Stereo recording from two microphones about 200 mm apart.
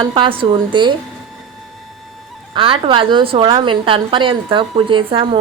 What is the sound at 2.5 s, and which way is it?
A woman's voice, 25° right (ahead or behind).